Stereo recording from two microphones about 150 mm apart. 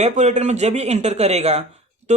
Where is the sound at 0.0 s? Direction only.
50° right (ahead or behind).